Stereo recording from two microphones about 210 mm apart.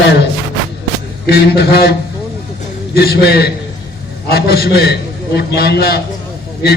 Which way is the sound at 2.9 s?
50° left (ahead or behind).